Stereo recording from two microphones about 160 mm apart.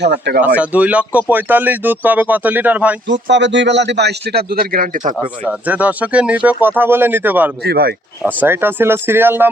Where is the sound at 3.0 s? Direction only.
90° right; by 5.2 s 55° right (ahead or behind).